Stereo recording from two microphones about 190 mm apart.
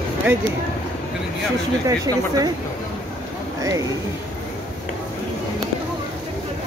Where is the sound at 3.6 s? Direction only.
15° right (ahead or behind).